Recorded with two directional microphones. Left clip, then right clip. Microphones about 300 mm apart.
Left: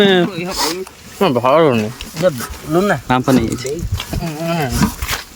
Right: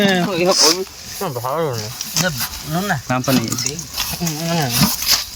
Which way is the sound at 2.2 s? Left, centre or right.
Left.